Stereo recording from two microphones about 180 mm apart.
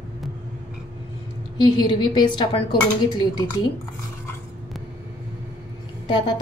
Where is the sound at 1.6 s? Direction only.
25° left (ahead or behind).